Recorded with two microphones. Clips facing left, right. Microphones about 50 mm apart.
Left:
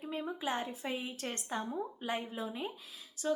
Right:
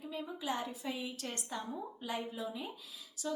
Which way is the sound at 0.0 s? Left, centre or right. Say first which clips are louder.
Left 3 dB; left.